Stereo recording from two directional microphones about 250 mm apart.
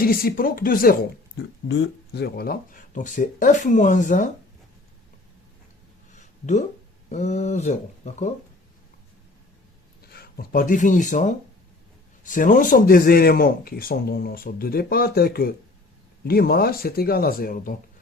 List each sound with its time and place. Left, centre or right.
0.0 s speech: left
1.4 s speech: left
6.1 s a sound: left
7.1 s speech: left
10.1 s speech: left